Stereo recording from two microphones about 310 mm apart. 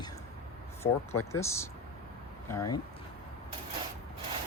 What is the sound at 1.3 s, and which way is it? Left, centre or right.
Speech, centre.